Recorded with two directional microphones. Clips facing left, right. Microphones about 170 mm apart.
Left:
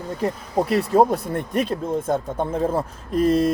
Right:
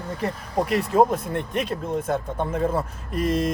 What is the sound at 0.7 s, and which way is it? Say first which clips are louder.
Speech: left 2 dB; 35° left (ahead or behind).